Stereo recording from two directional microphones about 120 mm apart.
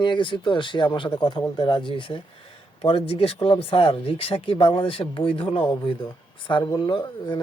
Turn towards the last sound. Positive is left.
turn(degrees=40)  # may be behind; listen again after turning